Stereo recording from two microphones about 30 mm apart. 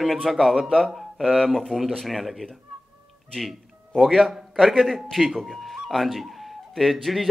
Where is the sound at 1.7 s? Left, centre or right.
Centre.